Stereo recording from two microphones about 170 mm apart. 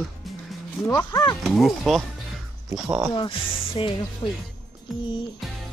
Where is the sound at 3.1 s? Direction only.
30° left (ahead or behind).